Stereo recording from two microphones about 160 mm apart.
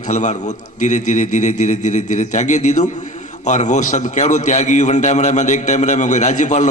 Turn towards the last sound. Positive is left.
turn(degrees=50)  # may be behind; listen again after turning